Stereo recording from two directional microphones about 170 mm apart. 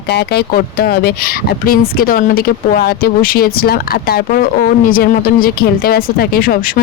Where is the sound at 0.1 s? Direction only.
75° left (ahead or behind).